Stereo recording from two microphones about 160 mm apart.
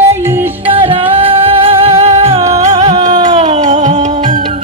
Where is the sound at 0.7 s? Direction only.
35° right (ahead or behind).